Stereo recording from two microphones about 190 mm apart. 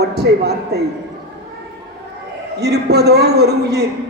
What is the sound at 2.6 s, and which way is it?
A man's voice, 60° right (ahead or behind).